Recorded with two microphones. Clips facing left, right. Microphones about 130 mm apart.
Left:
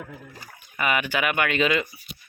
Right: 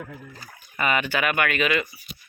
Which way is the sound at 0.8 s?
10° left (ahead or behind).